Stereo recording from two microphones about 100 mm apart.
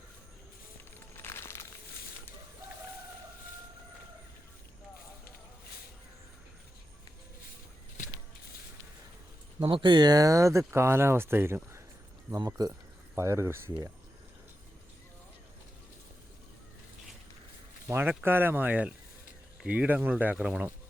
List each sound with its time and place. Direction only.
1.1 s a sound: 25° left (ahead or behind)
9.6 s speech: 55° right (ahead or behind); by 11.8 s 25° right (ahead or behind)
12.5 s speech: 40° right (ahead or behind)
13.1 s speech: 25° right (ahead or behind)
17.8 s speech: 20° right (ahead or behind)